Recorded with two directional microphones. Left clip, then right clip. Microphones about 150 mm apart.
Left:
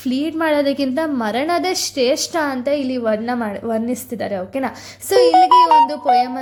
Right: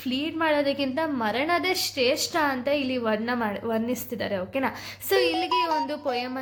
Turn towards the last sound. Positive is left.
turn(degrees=35)  # may be behind; listen again after turning